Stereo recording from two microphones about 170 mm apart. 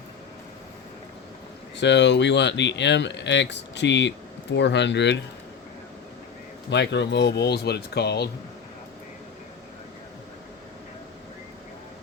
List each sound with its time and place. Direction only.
1.7 s speech: 90° left
6.7 s speech: 90° left; by 8.3 s 75° left (ahead or behind)